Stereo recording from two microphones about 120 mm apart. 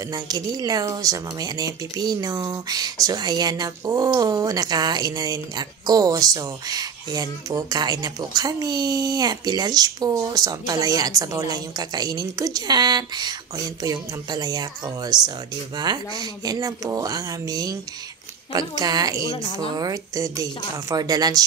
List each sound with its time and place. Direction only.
0.1 s speech: 30° right (ahead or behind)
19.2 s a woman's voice: 45° left (ahead or behind)
19.8 s speech: 30° right (ahead or behind)